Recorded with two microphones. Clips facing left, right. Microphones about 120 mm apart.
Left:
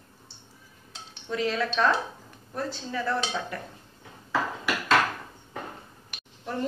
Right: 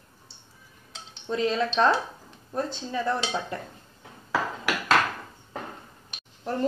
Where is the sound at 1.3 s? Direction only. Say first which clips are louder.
Right 2 dB; 25° right (ahead or behind).